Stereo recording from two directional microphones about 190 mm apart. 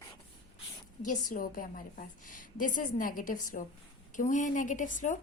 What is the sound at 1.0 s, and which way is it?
A woman's voice, 45° left (ahead or behind).